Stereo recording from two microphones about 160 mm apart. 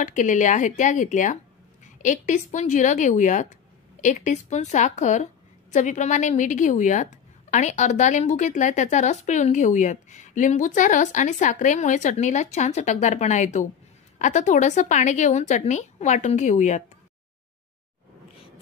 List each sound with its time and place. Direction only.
0.0 s a woman's voice: 50° left (ahead or behind)